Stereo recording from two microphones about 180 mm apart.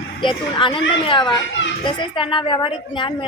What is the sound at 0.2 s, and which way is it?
A woman's voice, 30° left (ahead or behind).